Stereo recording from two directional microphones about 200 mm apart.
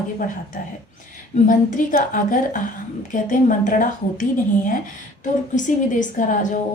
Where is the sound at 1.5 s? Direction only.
40° left (ahead or behind).